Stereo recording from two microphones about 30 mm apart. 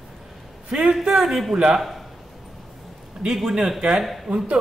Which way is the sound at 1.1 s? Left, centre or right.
Centre.